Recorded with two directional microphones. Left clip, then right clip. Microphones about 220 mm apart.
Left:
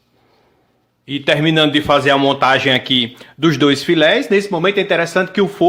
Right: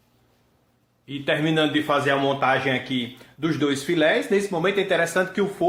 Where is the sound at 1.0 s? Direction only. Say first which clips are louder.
Left 8 dB; 40° left (ahead or behind).